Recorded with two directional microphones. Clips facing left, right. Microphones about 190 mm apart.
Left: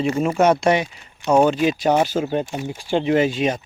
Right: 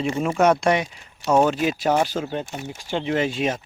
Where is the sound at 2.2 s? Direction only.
15° left (ahead or behind).